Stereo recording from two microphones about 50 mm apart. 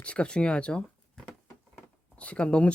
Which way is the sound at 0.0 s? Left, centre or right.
Left.